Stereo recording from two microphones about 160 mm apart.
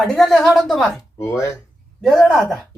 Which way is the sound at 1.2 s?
20° left (ahead or behind).